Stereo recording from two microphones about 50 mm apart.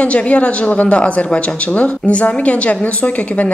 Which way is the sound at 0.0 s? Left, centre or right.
Left.